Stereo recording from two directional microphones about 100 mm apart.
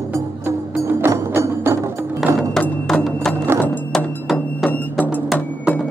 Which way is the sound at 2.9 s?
5° left (ahead or behind).